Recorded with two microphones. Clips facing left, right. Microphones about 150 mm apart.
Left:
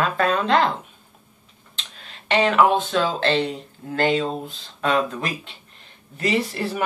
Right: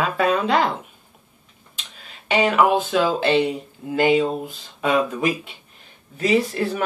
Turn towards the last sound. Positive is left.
turn(degrees=0)  # may be behind; listen again after turning